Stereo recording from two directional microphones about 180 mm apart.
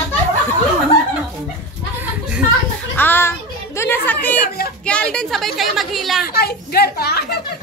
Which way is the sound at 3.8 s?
10° left (ahead or behind).